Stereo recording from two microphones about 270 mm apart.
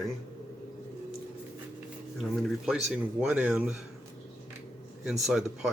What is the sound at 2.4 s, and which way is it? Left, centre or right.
Speech, centre.